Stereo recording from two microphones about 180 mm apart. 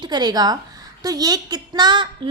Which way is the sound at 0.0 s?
25° right (ahead or behind).